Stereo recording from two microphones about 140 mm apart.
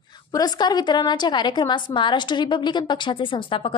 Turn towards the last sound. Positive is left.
turn(degrees=40)  # may be behind; listen again after turning